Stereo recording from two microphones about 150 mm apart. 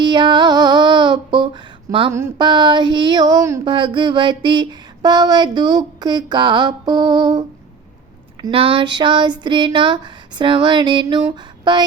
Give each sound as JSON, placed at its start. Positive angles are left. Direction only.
{"t": 0.0, "sound": "female singing", "side_deg": -30}
{"t": 2.4, "sound": "a sound", "side_deg": -30}
{"t": 8.4, "sound": "speech", "side_deg": -35}